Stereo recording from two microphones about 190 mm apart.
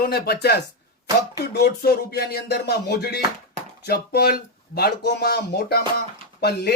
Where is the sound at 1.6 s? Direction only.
55° left (ahead or behind).